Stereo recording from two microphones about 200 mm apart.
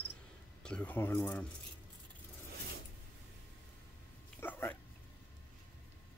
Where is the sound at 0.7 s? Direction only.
5° left (ahead or behind).